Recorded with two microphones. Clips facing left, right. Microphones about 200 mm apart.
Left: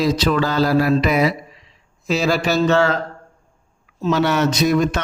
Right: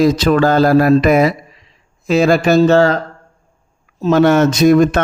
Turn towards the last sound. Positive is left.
turn(degrees=-50)  # may be behind; listen again after turning